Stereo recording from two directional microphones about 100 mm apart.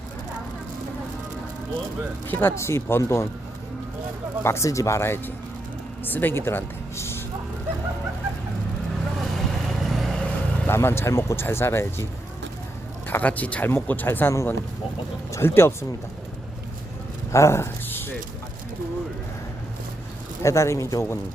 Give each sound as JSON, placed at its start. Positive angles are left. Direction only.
{"t": 2.2, "sound": "speech", "side_deg": 20}
{"t": 4.4, "sound": "speech", "side_deg": 30}
{"t": 9.4, "sound": "vehicle", "side_deg": 0}
{"t": 10.7, "sound": "speech", "side_deg": 25}
{"t": 13.1, "sound": "speech", "side_deg": 15}
{"t": 17.3, "sound": "speech", "side_deg": 30}
{"t": 20.4, "sound": "a man's voice", "side_deg": 30}